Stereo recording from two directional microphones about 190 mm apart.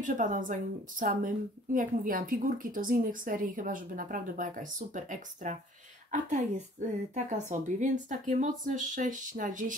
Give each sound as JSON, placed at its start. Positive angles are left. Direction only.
{"t": 0.0, "sound": "a woman's voice", "side_deg": -45}